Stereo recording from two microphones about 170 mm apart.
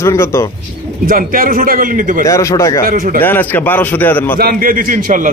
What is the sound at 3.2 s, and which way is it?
Speech, 10° left (ahead or behind).